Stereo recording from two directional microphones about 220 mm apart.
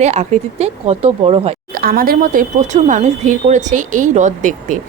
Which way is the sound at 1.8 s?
40° right (ahead or behind).